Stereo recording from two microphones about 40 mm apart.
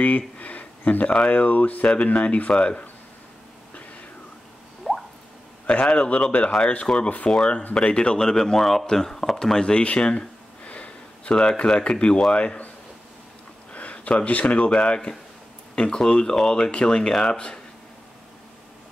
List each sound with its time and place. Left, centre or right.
0.0 s a sound: left
1.3 s speech: left
4.9 s drip: centre
5.7 s a man's voice: left; by 9.6 s centre
9.6 s speech: left
10.7 s sniff: left
11.3 s speech: left
13.7 s speech: left